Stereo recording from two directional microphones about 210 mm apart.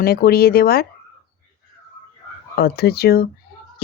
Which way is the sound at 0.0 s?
45° left (ahead or behind).